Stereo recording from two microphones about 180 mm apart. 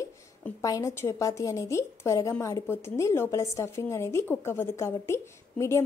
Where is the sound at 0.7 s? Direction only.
20° left (ahead or behind).